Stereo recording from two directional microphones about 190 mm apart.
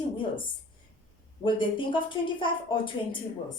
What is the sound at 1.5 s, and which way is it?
A woman's voice, 25° left (ahead or behind).